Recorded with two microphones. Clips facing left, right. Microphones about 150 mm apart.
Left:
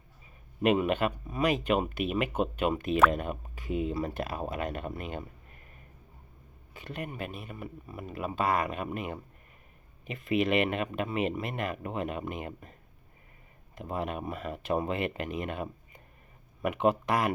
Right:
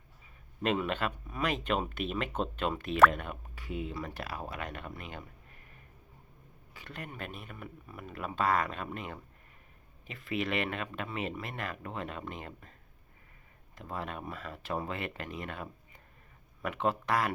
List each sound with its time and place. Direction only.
0.6 s speech: 15° left (ahead or behind)
6.7 s speech: 20° left (ahead or behind)
13.7 s speech: 20° left (ahead or behind)